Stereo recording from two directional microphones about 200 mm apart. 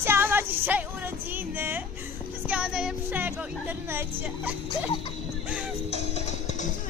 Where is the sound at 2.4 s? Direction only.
5° right (ahead or behind).